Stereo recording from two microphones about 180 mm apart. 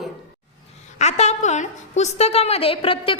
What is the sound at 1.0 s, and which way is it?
A woman's voice, 40° left (ahead or behind).